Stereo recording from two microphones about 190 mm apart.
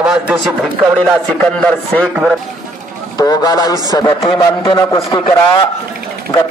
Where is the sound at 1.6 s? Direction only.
5° left (ahead or behind).